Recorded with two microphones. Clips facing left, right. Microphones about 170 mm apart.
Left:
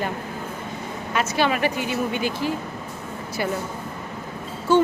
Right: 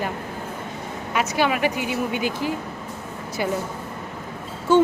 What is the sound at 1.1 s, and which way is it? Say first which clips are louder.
Speech: even; 10° right (ahead or behind).